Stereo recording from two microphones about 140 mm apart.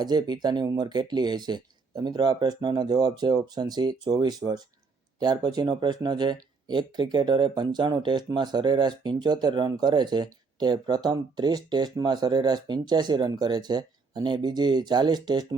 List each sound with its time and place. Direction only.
0.0 s speech: 30° right (ahead or behind)